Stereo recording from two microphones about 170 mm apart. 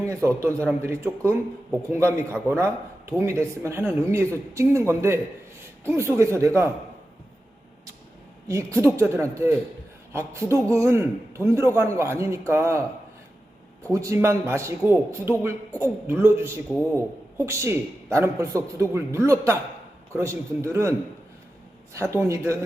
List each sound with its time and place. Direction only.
0.3 s a man's voice: 15° right (ahead or behind)
8.4 s a man's voice: 15° right (ahead or behind)
13.8 s a man's voice: 20° right (ahead or behind)
21.9 s a man's voice: 15° right (ahead or behind)